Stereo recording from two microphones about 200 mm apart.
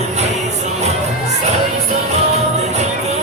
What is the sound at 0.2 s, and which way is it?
Music, 35° right (ahead or behind).